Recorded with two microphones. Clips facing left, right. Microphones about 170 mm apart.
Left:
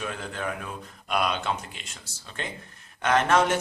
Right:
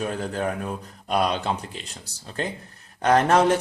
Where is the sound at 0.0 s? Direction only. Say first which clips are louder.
Right 6 dB; 40° right (ahead or behind).